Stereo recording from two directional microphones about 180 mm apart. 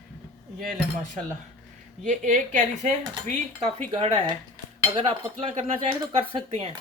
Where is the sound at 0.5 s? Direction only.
50° right (ahead or behind).